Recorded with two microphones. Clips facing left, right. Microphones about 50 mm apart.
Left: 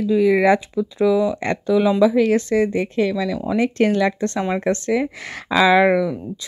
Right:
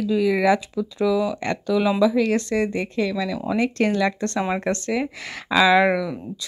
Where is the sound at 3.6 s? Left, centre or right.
Left.